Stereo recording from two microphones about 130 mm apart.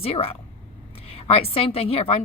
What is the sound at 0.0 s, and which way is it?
Speech, 50° left (ahead or behind).